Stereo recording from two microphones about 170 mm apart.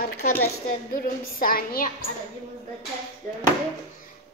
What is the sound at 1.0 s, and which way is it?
Speech, 60° left (ahead or behind).